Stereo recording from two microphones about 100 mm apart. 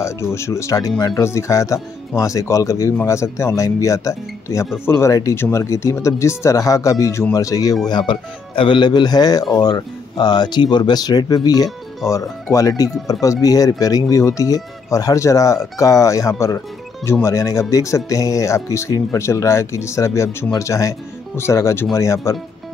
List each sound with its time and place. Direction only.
0.0 s speech: 30° left (ahead or behind)
7.8 s speech: 50° left (ahead or behind); by 22.4 s 30° left (ahead or behind)